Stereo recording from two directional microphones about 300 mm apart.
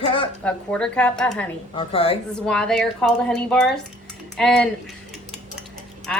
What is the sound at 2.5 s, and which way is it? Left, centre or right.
A woman's voice, centre.